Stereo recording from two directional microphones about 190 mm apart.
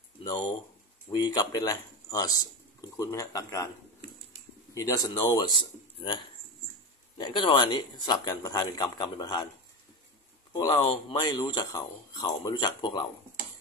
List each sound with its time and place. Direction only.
1.1 s speech: 20° left (ahead or behind)
4.7 s speech: 20° left (ahead or behind)
10.5 s speech: 20° left (ahead or behind)